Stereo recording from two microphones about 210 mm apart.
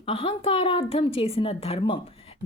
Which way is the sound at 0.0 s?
25° left (ahead or behind).